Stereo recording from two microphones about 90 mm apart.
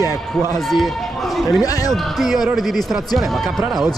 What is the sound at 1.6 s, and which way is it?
Speech, 45° left (ahead or behind).